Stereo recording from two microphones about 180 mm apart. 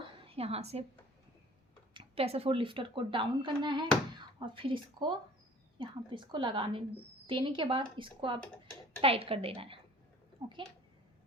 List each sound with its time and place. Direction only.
0.2 s a woman's voice: 35° right (ahead or behind)
1.9 s a woman's voice: 30° right (ahead or behind)